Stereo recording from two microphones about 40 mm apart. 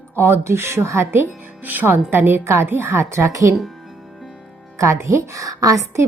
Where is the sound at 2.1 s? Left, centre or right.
Right.